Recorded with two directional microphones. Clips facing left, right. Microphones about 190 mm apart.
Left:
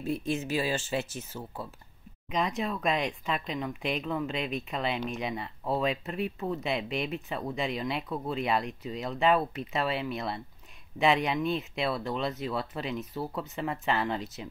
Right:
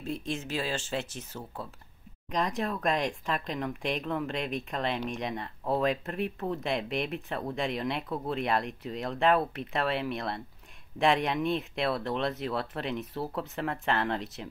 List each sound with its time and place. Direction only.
0.0 s speech: 5° left (ahead or behind)